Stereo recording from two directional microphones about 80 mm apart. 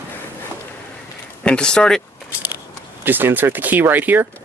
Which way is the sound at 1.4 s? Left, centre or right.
Centre.